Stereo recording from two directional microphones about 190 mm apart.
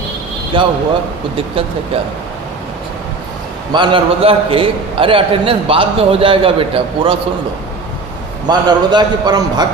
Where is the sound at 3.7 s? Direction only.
25° right (ahead or behind).